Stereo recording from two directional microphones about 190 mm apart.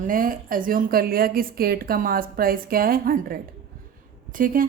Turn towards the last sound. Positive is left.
turn(degrees=-45)  # may be behind; listen again after turning